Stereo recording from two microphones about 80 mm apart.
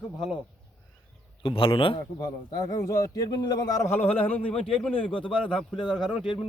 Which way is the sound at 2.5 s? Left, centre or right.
Left.